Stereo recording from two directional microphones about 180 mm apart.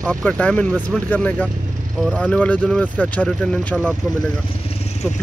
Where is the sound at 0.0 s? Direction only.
5° left (ahead or behind).